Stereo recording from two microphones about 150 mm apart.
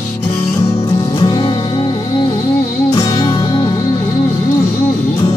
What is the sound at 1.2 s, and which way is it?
Music, 30° left (ahead or behind).